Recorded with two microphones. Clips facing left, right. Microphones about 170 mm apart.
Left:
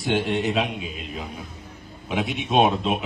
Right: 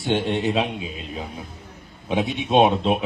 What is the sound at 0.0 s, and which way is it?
Speech, 30° right (ahead or behind).